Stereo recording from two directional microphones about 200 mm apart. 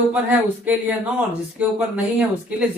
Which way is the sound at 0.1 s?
10° right (ahead or behind).